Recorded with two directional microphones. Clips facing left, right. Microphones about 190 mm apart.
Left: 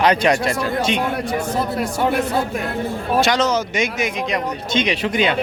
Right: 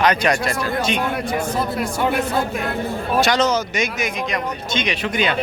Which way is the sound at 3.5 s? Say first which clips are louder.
Left 1 dB; 25° left (ahead or behind).